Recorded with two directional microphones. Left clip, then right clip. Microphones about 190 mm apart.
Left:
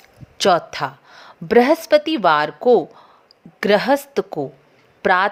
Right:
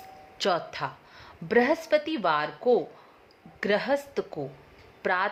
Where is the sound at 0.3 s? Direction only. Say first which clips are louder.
Left 11 dB; 35° left (ahead or behind).